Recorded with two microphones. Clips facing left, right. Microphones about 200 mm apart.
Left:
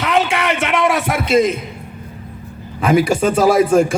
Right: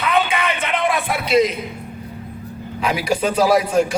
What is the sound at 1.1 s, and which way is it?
Speech, 45° left (ahead or behind).